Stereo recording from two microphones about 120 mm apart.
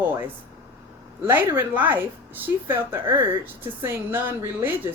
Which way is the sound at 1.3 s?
15° right (ahead or behind).